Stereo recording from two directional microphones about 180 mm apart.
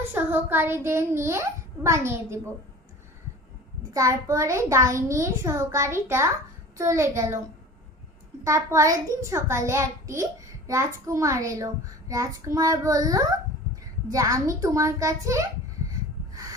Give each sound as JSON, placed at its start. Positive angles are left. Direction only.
{"t": 0.1, "sound": "a child's voice", "side_deg": -10}
{"t": 3.9, "sound": "a child's voice", "side_deg": -15}
{"t": 8.4, "sound": "a child's voice", "side_deg": -15}
{"t": 15.9, "sound": "snort", "side_deg": -20}